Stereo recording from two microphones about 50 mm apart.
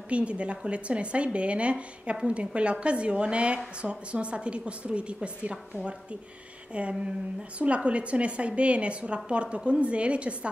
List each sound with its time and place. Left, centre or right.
0.1 s speech: right